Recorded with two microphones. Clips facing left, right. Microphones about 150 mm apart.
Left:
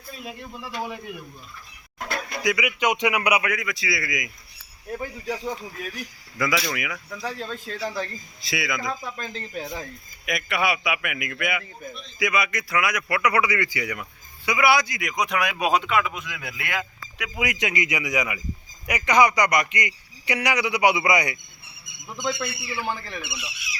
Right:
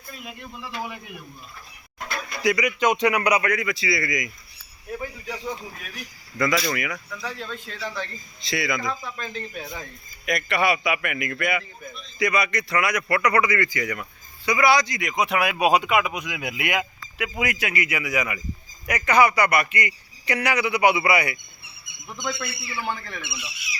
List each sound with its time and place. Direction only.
0.2 s speech: 25° left (ahead or behind)
2.0 s a sound: 55° left (ahead or behind)
2.4 s a man's voice: 5° left (ahead or behind)
4.9 s speech: 40° left (ahead or behind)
6.3 s a man's voice: centre (ahead or behind)
7.1 s speech: 35° left (ahead or behind)
8.4 s a man's voice: centre (ahead or behind)
8.9 s speech: 40° left (ahead or behind)
10.2 s a man's voice: centre (ahead or behind); by 16.8 s 15° right (ahead or behind)
17.3 s a man's voice: 15° left (ahead or behind)